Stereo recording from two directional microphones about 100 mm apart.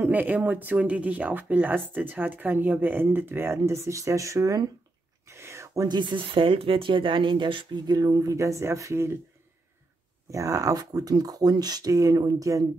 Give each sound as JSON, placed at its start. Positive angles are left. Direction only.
{"t": 0.0, "sound": "speech", "side_deg": -20}
{"t": 5.3, "sound": "a sound", "side_deg": -25}
{"t": 5.9, "sound": "speech", "side_deg": -50}
{"t": 7.8, "sound": "speech", "side_deg": -40}
{"t": 10.3, "sound": "speech", "side_deg": -35}